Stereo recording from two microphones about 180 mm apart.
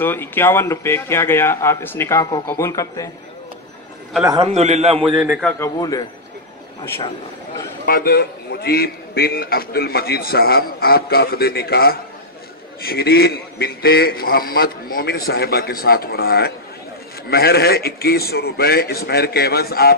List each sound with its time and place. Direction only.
0.0 s a man's voice: 10° left (ahead or behind)
4.4 s a man's voice: 40° right (ahead or behind)
5.6 s a man's voice: 20° left (ahead or behind)
7.8 s a man's voice: 55° left (ahead or behind)